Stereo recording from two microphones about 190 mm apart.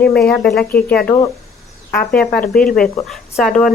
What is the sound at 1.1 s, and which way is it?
Speech, 15° left (ahead or behind).